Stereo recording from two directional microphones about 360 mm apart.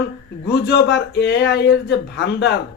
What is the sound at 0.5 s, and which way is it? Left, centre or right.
Speech, left.